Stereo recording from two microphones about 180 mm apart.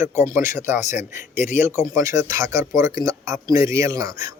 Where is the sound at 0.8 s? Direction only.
40° left (ahead or behind).